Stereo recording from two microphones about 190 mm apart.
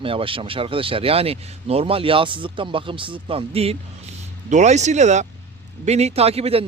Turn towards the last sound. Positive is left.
turn(degrees=-30)  # may be behind; listen again after turning